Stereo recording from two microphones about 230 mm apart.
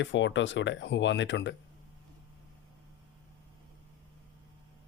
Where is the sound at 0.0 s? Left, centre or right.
Left.